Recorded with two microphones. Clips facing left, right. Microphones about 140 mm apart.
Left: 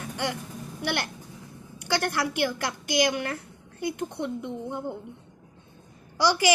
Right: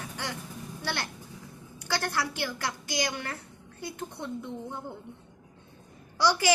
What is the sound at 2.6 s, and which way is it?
A child's voice, 20° left (ahead or behind).